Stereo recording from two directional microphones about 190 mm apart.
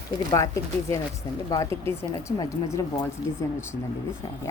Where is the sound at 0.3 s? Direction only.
20° left (ahead or behind).